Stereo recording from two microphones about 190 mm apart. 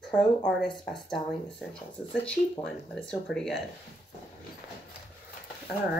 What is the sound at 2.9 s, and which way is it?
Speech, 5° left (ahead or behind).